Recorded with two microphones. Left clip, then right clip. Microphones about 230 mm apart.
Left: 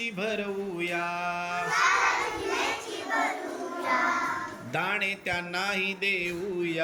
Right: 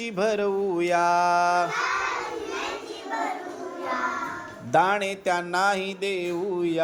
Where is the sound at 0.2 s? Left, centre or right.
Centre.